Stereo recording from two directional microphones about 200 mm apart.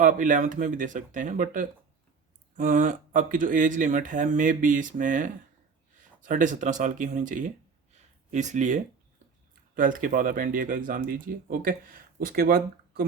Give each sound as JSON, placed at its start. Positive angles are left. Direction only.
{"t": 0.0, "sound": "speech", "side_deg": -40}